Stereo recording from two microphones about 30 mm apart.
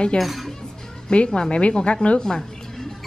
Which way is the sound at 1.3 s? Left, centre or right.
Left.